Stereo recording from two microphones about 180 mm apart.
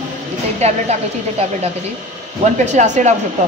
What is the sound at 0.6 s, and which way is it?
Speech, 35° right (ahead or behind).